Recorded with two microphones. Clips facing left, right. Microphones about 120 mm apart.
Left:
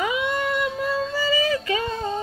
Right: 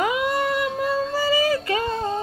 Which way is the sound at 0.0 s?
45° right (ahead or behind).